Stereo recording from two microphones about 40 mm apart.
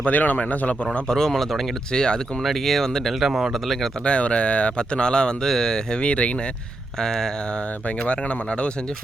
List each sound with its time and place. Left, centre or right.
0.1 s speech: left
1.0 s speech: centre
1.9 s speech: centre
2.4 s speech: centre
3.3 s speech: centre
4.0 s speech: left
7.0 s speech: centre
7.9 s speech: left